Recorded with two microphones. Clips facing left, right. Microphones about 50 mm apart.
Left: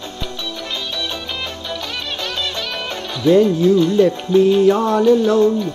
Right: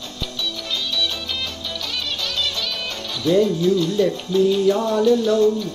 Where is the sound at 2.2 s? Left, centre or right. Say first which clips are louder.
Left 2 dB; left.